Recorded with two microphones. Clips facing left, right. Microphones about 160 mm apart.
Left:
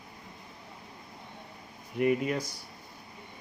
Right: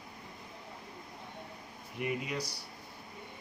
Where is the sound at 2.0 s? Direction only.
55° left (ahead or behind).